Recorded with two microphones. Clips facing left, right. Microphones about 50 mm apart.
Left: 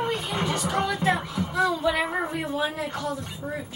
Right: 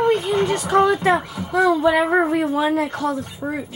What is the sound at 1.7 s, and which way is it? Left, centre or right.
Speech, right.